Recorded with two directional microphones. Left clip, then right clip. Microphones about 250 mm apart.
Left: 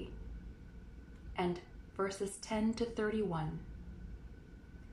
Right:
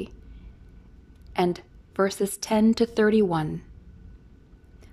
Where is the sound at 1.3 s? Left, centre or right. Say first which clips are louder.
Right 12 dB; right.